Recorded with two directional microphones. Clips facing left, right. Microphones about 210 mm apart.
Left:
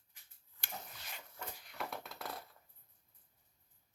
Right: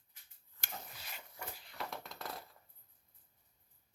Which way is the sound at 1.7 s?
Centre (ahead or behind).